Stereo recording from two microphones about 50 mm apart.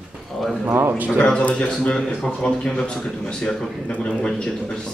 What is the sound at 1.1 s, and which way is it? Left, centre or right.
A man's voice, centre.